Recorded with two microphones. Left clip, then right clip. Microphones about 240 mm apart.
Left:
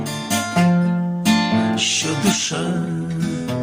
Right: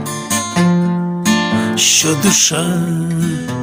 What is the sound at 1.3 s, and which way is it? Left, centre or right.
Music, right.